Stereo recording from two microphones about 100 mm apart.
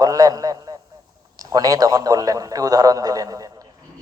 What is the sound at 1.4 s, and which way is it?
A man's voice, 40° right (ahead or behind).